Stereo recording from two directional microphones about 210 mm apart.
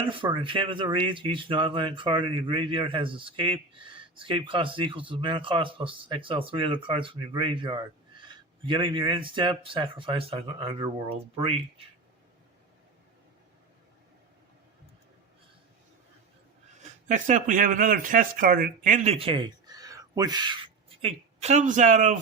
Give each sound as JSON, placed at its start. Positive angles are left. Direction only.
{"t": 0.1, "sound": "speech", "side_deg": -25}
{"t": 16.7, "sound": "speech", "side_deg": -35}